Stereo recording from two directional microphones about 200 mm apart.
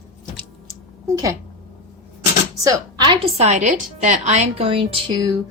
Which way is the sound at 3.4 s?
35° right (ahead or behind).